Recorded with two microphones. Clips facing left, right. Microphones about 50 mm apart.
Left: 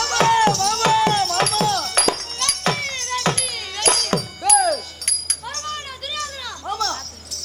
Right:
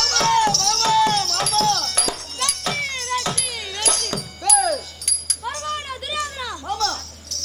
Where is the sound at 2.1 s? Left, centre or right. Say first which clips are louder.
Left 3 dB; left.